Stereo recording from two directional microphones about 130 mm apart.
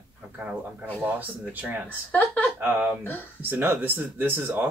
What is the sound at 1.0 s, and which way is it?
Speech, 15° right (ahead or behind).